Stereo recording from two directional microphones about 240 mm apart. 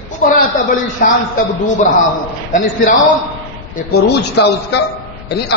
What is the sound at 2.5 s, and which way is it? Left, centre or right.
Speech, left.